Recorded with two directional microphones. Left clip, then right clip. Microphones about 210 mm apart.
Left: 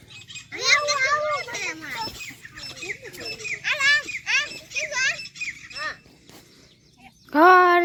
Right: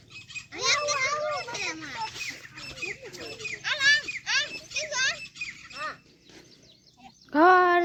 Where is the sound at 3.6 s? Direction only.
5° right (ahead or behind).